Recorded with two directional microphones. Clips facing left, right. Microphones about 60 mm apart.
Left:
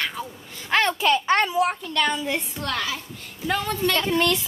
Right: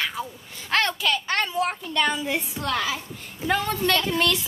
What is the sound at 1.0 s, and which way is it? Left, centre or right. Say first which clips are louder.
Speech: left 5 dB; left.